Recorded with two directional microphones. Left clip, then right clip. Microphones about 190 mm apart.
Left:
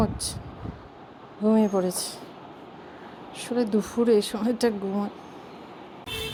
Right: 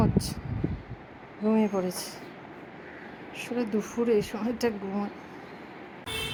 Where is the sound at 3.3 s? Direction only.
20° left (ahead or behind).